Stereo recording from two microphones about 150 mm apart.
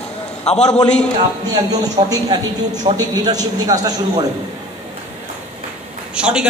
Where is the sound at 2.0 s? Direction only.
25° right (ahead or behind).